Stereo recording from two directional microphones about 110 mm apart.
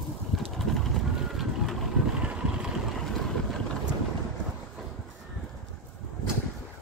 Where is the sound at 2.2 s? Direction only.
10° right (ahead or behind).